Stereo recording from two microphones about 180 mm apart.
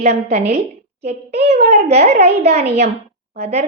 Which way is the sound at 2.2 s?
65° right (ahead or behind).